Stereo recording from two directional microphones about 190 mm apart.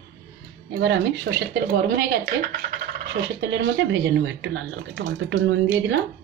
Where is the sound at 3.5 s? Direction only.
70° right (ahead or behind).